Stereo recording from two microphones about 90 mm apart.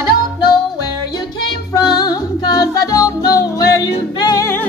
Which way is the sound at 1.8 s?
50° left (ahead or behind).